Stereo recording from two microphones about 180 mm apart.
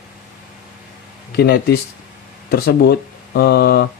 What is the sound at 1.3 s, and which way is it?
Speech, 60° left (ahead or behind).